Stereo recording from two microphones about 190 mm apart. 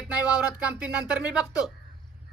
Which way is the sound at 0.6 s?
5° right (ahead or behind).